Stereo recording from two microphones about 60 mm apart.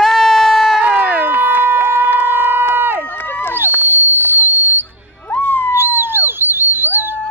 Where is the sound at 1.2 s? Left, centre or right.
Right.